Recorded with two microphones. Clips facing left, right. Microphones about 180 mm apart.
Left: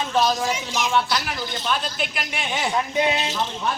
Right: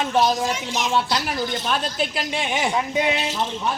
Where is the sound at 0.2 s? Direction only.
20° right (ahead or behind).